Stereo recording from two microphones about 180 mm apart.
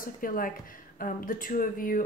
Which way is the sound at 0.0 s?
50° left (ahead or behind).